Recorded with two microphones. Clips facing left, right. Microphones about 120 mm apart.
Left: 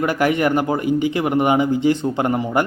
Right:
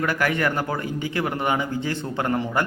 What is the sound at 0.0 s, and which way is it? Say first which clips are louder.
Speech: left 5 dB; 20° left (ahead or behind).